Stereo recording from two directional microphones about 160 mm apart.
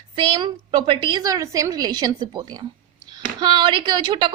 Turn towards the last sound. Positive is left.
turn(degrees=-25)  # may be behind; listen again after turning